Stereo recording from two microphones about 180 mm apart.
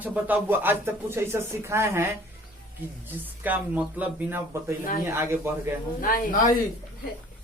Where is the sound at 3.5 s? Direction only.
10° right (ahead or behind).